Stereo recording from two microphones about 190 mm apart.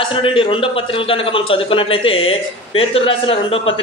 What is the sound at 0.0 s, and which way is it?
A man's voice, 25° left (ahead or behind).